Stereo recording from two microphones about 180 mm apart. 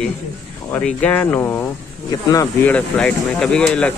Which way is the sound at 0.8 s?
5° left (ahead or behind).